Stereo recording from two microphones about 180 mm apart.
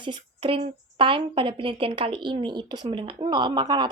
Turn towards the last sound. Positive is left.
turn(degrees=-25)  # may be behind; listen again after turning